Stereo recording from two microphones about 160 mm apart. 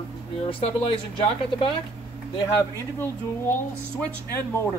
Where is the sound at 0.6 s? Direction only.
35° left (ahead or behind).